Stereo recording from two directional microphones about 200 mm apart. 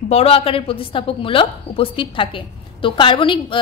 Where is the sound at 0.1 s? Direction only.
30° left (ahead or behind).